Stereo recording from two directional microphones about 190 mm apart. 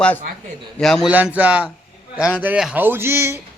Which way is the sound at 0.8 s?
Centre (ahead or behind).